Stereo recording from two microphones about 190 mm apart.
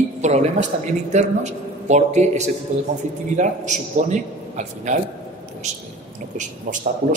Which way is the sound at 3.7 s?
40° right (ahead or behind).